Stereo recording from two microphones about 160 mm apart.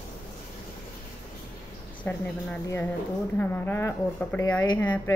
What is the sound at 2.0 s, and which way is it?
A woman's voice, 10° left (ahead or behind).